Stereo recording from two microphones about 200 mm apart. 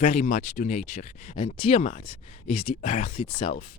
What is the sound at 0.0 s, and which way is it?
Speech, 35° left (ahead or behind).